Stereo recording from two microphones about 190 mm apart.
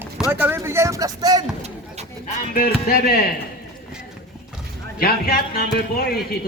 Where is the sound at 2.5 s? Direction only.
50° left (ahead or behind).